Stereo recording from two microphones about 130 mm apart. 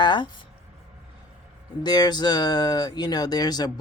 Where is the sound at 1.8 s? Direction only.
35° left (ahead or behind).